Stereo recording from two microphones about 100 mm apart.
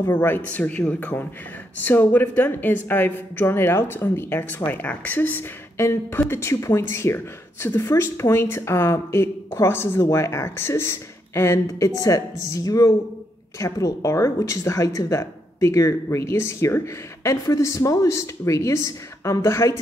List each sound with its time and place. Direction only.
0.0 s a woman's voice: 20° left (ahead or behind)